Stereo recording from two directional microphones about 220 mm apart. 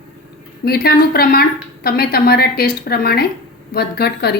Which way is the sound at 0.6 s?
45° left (ahead or behind).